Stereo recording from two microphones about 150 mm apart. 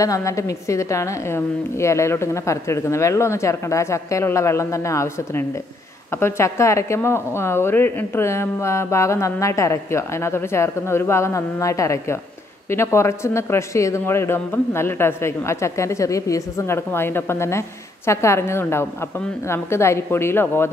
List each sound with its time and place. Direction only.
0.0 s a woman's voice: 20° left (ahead or behind)